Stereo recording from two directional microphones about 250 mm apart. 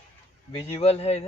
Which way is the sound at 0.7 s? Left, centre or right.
Left.